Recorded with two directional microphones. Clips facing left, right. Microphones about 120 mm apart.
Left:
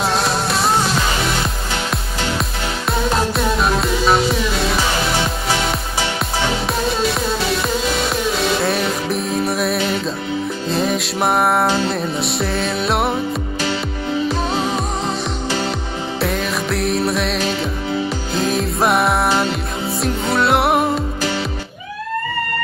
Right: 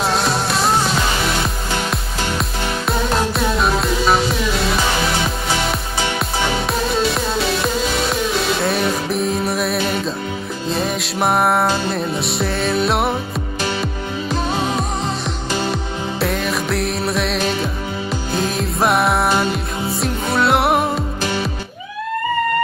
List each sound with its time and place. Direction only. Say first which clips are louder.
0.0 s music: even; centre (ahead or behind)
2.9 s music: left 1 dB; centre (ahead or behind)
6.7 s music: even; centre (ahead or behind)
16.2 s music: even; centre (ahead or behind)